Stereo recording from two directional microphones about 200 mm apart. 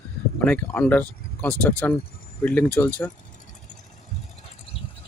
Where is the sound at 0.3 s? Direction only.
5° left (ahead or behind).